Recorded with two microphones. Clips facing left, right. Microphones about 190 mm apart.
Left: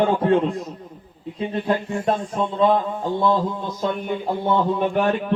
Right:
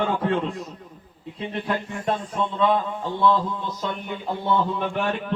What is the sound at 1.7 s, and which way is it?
Speech, 25° left (ahead or behind).